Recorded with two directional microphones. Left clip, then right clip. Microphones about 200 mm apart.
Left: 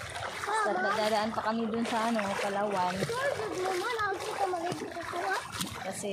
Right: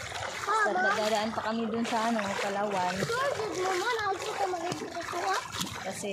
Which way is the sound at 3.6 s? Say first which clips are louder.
Right 2 dB; 20° right (ahead or behind).